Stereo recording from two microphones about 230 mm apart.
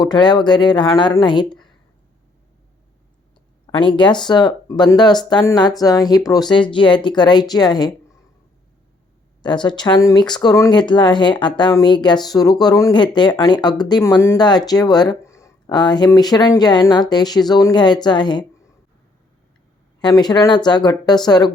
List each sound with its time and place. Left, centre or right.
0.0 s speech: centre
3.7 s speech: left
9.4 s speech: centre
20.0 s speech: centre